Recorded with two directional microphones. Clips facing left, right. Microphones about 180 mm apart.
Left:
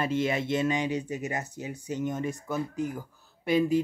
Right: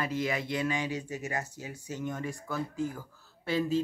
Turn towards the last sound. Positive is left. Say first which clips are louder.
# left 5 dB
turn(degrees=15)  # may be behind; listen again after turning